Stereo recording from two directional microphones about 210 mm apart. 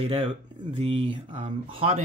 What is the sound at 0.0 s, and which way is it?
Speech, 30° right (ahead or behind).